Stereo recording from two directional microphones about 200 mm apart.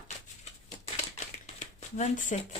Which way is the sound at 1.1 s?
35° left (ahead or behind).